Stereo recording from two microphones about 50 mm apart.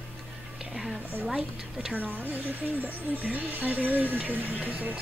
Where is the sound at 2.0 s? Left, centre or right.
Right.